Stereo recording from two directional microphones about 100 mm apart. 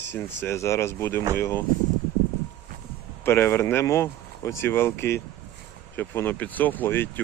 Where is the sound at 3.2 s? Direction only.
25° left (ahead or behind).